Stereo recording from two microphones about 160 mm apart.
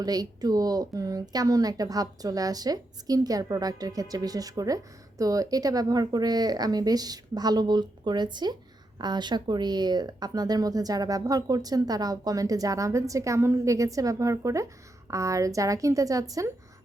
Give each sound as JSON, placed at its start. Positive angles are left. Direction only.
{"t": 0.0, "sound": "speech", "side_deg": -25}